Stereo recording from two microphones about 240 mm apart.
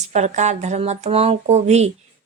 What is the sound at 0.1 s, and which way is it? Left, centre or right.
Speech, right.